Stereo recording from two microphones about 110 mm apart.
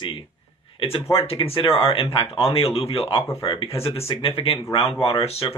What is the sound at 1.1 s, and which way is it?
Speech, 60° left (ahead or behind).